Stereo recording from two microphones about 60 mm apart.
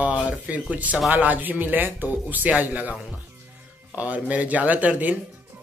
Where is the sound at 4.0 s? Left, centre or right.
Right.